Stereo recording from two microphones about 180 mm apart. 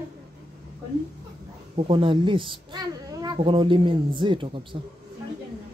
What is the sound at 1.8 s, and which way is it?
A child's voice, 30° right (ahead or behind).